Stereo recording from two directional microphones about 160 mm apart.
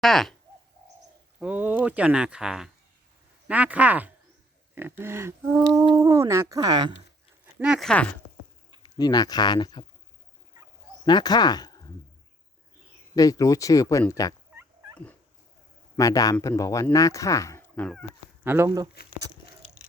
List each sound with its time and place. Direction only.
0.0 s speech: centre (ahead or behind)
1.4 s speech: 10° right (ahead or behind); by 6.9 s 25° right (ahead or behind)
7.4 s speech: 5° right (ahead or behind)
8.8 s speech: 25° left (ahead or behind)
11.0 s speech: 25° left (ahead or behind)
13.1 s speech: 20° left (ahead or behind)
14.5 s fowl: 15° right (ahead or behind)
16.0 s speech: 20° left (ahead or behind)
18.4 s speech: 15° right (ahead or behind)